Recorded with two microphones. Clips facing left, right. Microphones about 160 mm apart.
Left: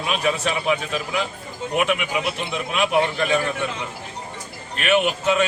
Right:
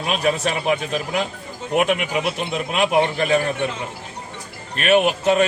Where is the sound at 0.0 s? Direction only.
45° right (ahead or behind).